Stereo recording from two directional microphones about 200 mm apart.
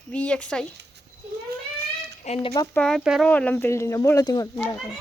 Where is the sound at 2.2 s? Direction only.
35° left (ahead or behind).